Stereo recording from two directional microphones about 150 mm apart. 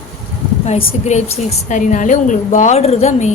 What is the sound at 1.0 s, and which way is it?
A woman's voice, 50° left (ahead or behind).